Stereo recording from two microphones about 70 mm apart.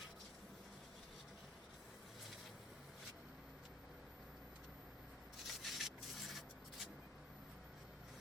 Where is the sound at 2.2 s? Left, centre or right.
Centre.